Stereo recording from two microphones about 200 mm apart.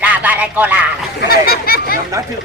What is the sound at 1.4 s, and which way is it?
Speech, 50° left (ahead or behind).